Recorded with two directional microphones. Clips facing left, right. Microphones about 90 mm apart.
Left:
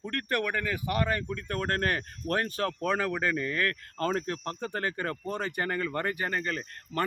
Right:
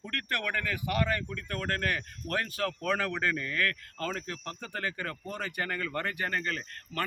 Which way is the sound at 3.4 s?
25° left (ahead or behind).